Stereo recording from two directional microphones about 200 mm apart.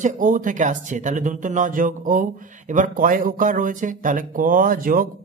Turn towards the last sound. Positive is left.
turn(degrees=-45)  # may be behind; listen again after turning